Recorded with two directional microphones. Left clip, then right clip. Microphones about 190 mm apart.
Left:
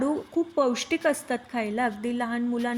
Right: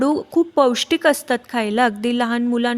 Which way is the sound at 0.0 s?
55° right (ahead or behind).